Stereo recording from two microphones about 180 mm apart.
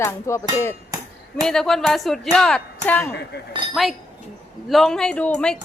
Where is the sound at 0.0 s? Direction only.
15° left (ahead or behind).